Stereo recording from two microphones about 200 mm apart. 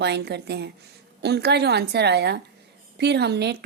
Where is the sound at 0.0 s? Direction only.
55° right (ahead or behind).